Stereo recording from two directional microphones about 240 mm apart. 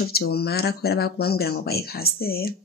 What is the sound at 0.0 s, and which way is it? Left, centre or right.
Speech, left.